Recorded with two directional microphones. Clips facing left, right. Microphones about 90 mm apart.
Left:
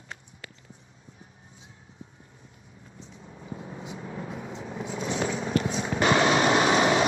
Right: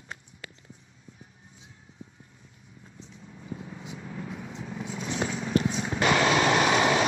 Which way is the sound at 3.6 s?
30° left (ahead or behind).